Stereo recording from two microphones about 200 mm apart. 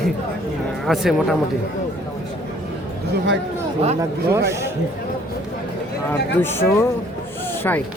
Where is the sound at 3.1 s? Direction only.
60° right (ahead or behind).